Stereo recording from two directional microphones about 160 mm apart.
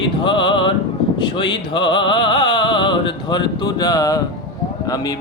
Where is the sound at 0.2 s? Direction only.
30° left (ahead or behind).